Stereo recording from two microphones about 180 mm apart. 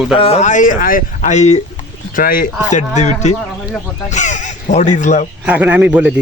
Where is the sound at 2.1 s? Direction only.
50° left (ahead or behind).